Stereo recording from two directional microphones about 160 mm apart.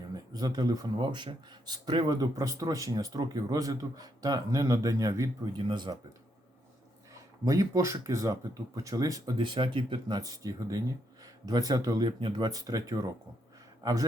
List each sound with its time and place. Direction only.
0.1 s speech: 25° right (ahead or behind)
7.1 s a man's voice: 20° right (ahead or behind)